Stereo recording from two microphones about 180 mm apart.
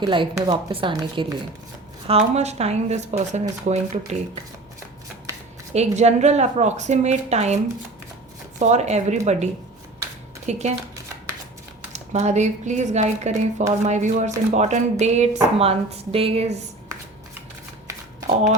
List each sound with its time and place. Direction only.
0.0 s speech: 25° right (ahead or behind); by 3.8 s 45° right (ahead or behind)
5.7 s speech: 35° right (ahead or behind)
11.9 s speech: 40° right (ahead or behind)